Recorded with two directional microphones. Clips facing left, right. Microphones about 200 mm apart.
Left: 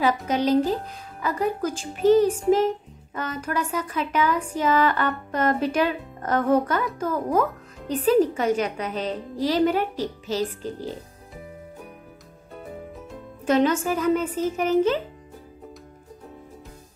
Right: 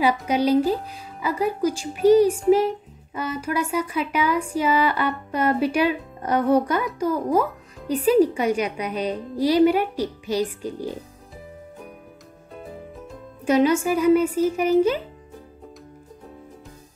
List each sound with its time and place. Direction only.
0.0 s speech: 10° right (ahead or behind)
13.5 s speech: 10° right (ahead or behind)